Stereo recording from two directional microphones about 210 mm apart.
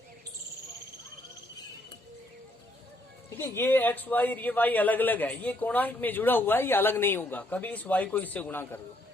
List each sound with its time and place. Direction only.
3.2 s a man's voice: 10° left (ahead or behind)